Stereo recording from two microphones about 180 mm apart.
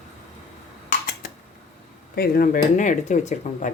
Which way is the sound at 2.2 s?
55° left (ahead or behind).